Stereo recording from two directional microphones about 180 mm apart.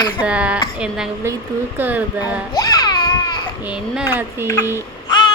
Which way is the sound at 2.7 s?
20° left (ahead or behind).